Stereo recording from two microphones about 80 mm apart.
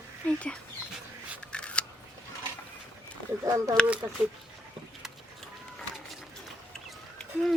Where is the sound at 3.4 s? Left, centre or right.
Right.